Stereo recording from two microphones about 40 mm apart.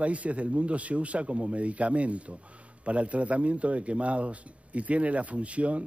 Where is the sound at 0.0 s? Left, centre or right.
Right.